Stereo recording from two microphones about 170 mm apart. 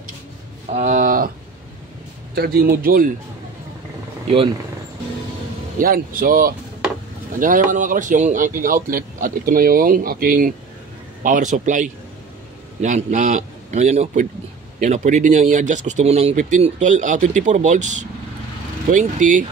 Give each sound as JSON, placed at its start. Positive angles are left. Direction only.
{"t": 0.7, "sound": "speech", "side_deg": -40}
{"t": 2.3, "sound": "speech", "side_deg": -65}
{"t": 5.8, "sound": "speech", "side_deg": -55}